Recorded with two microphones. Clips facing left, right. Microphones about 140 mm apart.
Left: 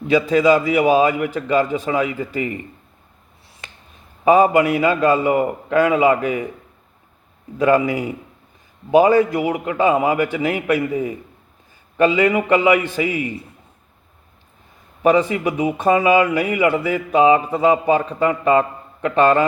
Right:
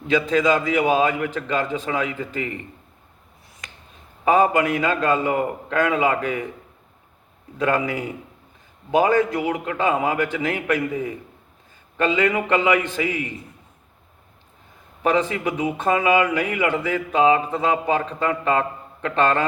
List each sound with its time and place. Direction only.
0.1 s a man's voice: 10° left (ahead or behind)
3.6 s a sound: 30° left (ahead or behind)
4.3 s a man's voice: 10° left (ahead or behind)
7.6 s a man's voice: 10° left (ahead or behind)
15.0 s a man's voice: 10° left (ahead or behind)